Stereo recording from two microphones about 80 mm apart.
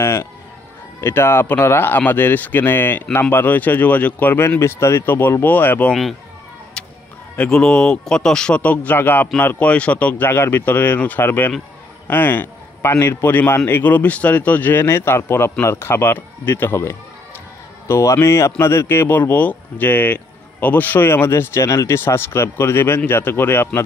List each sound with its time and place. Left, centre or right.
0.0 s music: left
1.0 s speech: left
6.8 s a sound: centre
7.3 s a man's voice: centre; by 23.8 s left